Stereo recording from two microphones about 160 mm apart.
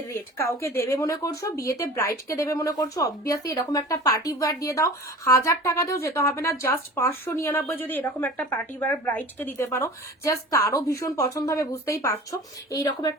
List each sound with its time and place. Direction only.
0.1 s a woman's voice: 15° left (ahead or behind)